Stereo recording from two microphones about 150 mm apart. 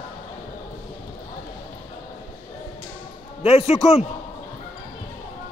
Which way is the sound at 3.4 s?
40° left (ahead or behind).